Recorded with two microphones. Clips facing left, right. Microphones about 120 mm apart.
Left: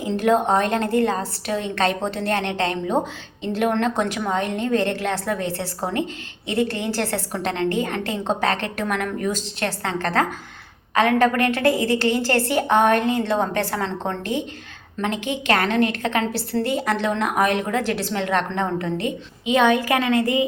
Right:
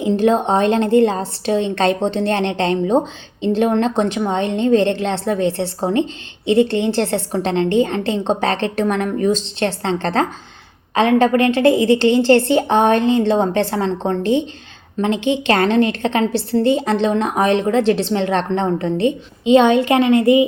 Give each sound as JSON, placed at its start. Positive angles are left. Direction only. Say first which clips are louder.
{"t": 0.0, "sound": "a woman's voice", "louder": "right 4 dB", "side_deg": -25}